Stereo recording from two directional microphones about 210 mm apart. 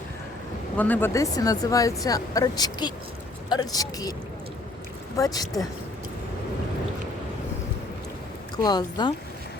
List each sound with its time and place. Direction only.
0.8 s speech: 10° left (ahead or behind)
5.1 s speech: 15° left (ahead or behind)
8.5 s speech: 20° left (ahead or behind)